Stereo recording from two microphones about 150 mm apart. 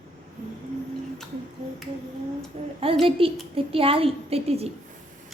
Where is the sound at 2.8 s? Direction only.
40° right (ahead or behind).